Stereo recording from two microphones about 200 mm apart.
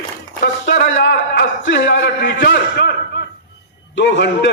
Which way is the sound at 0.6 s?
50° left (ahead or behind).